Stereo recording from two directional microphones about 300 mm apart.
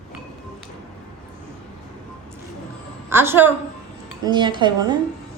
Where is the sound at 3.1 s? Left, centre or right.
Centre.